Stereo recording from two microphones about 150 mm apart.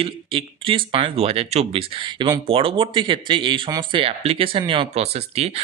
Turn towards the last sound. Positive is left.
turn(degrees=-45)  # may be behind; listen again after turning